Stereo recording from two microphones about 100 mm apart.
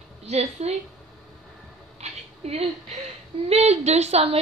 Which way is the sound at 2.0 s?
90° right.